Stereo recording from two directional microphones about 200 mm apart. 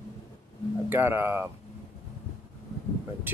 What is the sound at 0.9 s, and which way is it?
Speech, 10° right (ahead or behind).